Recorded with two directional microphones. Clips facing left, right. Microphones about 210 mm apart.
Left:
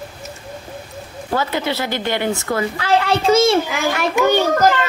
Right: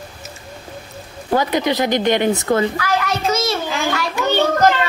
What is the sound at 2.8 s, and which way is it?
Speech, 30° left (ahead or behind).